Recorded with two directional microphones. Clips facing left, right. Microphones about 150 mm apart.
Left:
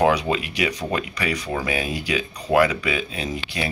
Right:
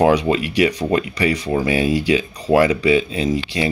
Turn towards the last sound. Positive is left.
turn(degrees=-30)  # may be behind; listen again after turning